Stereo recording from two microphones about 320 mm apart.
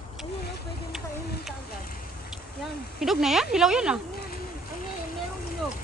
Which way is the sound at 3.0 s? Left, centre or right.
Centre.